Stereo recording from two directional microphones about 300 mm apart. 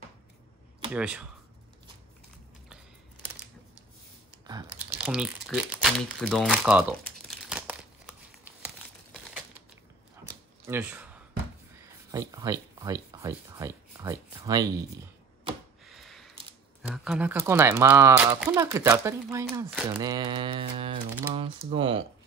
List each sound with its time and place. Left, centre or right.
0.9 s speech: centre
4.5 s crumpling: centre
10.2 s a sound: centre
11.8 s speech: centre
15.8 s a sound: centre
16.8 s speech: centre